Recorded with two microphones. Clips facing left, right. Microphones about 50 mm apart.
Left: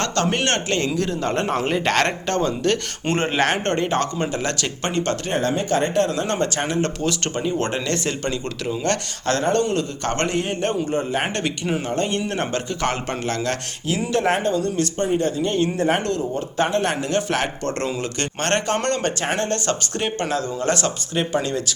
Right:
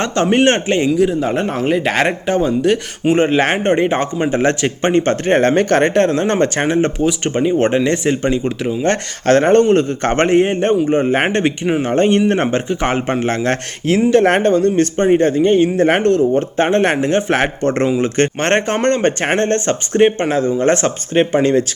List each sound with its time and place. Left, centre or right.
0.0 s speech: right
0.9 s speech: centre; by 5.4 s right
5.4 s speech: right
9.2 s speech: right
11.0 s speech: right
11.3 s speech: right
14.3 s speech: right
14.5 s speech: right
15.8 s speech: right